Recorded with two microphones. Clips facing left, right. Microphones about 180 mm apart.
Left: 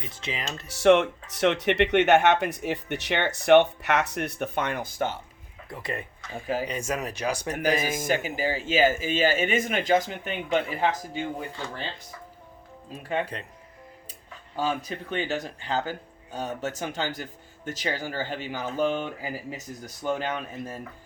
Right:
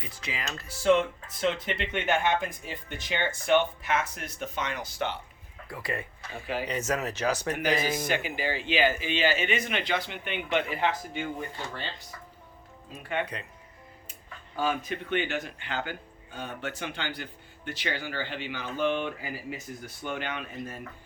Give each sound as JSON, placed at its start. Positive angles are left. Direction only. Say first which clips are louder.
{"t": 0.1, "sound": "speech", "louder": "left 2 dB", "side_deg": 25}
{"t": 0.7, "sound": "speech", "louder": "left 4 dB", "side_deg": 75}
{"t": 5.6, "sound": "speech", "louder": "left 1 dB", "side_deg": 20}
{"t": 8.0, "sound": "speech", "louder": "left 3 dB", "side_deg": 40}
{"t": 13.1, "sound": "speech", "louder": "left 3 dB", "side_deg": 30}
{"t": 14.5, "sound": "speech", "louder": "left 1 dB", "side_deg": 35}